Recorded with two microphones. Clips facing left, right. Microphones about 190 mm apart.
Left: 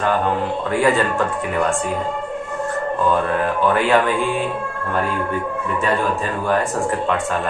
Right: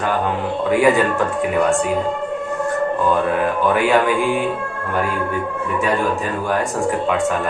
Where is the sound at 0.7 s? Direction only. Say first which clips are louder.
Right 3 dB; 15° right (ahead or behind).